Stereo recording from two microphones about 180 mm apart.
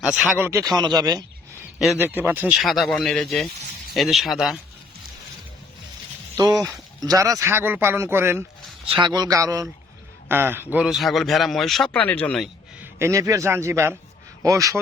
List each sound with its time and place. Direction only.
0.2 s speech: 10° right (ahead or behind)
2.0 s a man's voice: 10° right (ahead or behind)
6.3 s speech: 20° right (ahead or behind)
8.9 s a man's voice: 25° right (ahead or behind); by 12.5 s 5° left (ahead or behind)
12.8 s speech: 15° right (ahead or behind)